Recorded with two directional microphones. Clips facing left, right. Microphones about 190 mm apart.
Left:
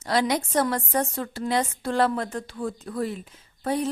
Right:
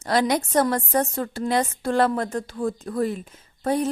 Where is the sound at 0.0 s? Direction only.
50° right (ahead or behind).